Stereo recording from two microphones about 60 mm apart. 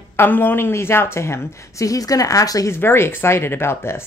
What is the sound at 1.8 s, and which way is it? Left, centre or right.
Speech, left.